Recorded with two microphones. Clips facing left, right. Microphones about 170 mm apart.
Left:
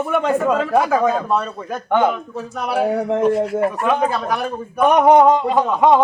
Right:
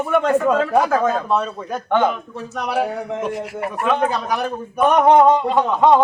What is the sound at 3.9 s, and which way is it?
A man's voice, 5° left (ahead or behind).